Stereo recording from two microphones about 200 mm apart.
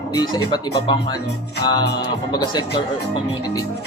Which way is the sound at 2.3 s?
20° left (ahead or behind).